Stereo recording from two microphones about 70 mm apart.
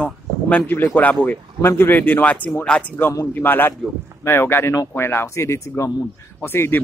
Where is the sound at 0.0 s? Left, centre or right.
Centre.